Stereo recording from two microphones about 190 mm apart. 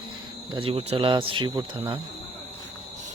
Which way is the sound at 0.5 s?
30° right (ahead or behind).